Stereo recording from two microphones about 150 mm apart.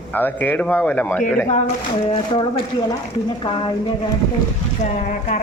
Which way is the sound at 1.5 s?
50° left (ahead or behind).